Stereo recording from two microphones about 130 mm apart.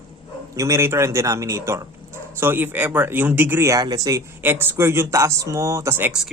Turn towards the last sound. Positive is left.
turn(degrees=-20)  # may be behind; listen again after turning